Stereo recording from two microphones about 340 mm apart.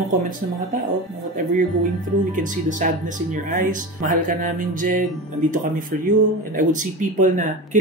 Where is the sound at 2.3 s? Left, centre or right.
Right.